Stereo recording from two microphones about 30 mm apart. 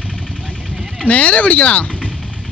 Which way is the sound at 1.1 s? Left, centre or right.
Left.